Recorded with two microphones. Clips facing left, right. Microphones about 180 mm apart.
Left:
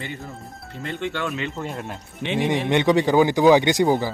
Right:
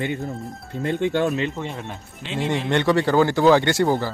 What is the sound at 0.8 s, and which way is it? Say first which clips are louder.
Speech: right 7 dB; 50° right (ahead or behind).